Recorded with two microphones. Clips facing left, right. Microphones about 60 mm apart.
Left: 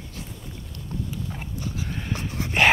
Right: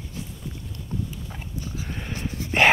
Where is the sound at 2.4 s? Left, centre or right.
Left.